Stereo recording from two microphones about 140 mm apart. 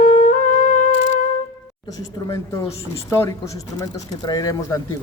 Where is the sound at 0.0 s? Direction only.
65° left (ahead or behind).